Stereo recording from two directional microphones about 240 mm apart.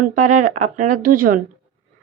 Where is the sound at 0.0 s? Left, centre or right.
Right.